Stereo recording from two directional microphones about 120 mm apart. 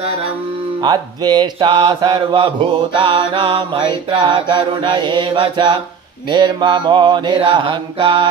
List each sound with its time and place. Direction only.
0.7 s mantra: 35° right (ahead or behind)